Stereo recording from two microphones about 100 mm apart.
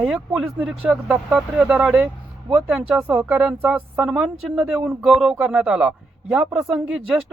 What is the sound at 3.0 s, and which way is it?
Speech, 20° right (ahead or behind).